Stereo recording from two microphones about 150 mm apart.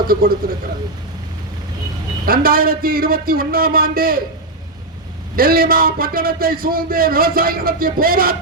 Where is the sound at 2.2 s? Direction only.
75° right (ahead or behind).